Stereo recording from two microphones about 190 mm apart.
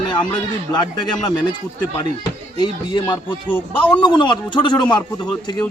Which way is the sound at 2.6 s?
25° left (ahead or behind).